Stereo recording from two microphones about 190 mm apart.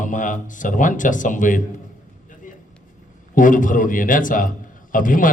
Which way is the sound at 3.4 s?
45° left (ahead or behind).